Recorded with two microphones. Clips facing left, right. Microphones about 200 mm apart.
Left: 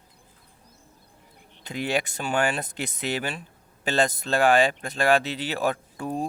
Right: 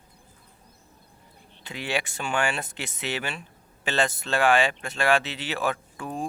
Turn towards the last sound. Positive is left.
turn(degrees=35)  # may be behind; listen again after turning